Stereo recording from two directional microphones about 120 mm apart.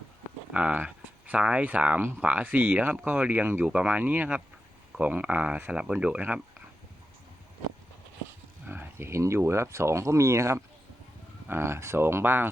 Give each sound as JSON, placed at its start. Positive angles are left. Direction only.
{"t": 0.5, "sound": "speech", "side_deg": -10}
{"t": 8.6, "sound": "speech", "side_deg": -15}